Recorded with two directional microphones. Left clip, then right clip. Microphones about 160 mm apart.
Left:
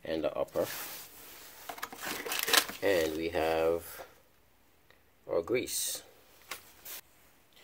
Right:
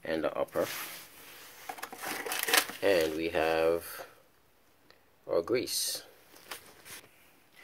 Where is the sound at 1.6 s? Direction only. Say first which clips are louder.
Even; 40° left (ahead or behind).